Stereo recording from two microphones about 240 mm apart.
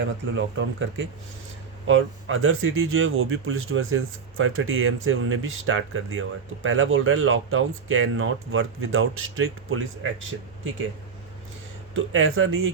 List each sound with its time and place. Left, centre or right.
0.0 s speech: right
11.9 s speech: right